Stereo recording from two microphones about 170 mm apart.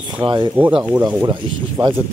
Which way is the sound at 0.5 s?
10° right (ahead or behind).